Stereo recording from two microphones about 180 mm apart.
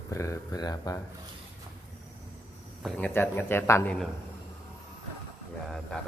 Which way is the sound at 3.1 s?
10° left (ahead or behind).